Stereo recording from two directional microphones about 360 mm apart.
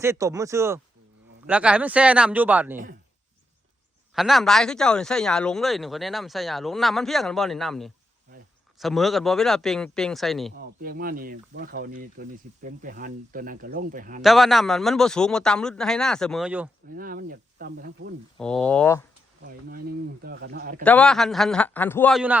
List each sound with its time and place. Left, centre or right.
0.0 s speech: centre
4.1 s speech: centre
10.6 s speech: right
14.2 s speech: centre
17.0 s speech: right
18.3 s speech: centre
19.6 s speech: right
20.8 s speech: centre